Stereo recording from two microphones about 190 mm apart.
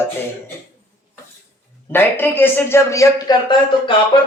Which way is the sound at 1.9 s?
10° left (ahead or behind).